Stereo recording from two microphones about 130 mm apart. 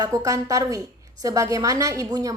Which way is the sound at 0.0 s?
25° right (ahead or behind).